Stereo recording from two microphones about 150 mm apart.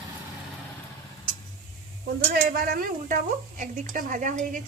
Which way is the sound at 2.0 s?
85° right.